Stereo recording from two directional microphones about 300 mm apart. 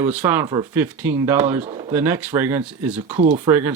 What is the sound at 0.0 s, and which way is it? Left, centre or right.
Speech, centre.